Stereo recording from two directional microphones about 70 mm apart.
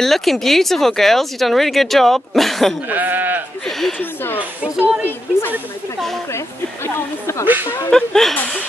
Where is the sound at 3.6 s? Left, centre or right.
Centre.